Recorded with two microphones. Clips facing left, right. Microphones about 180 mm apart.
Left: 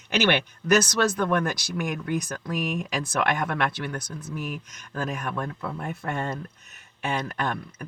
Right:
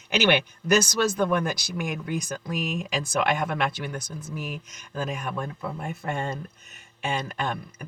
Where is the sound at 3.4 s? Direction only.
25° right (ahead or behind).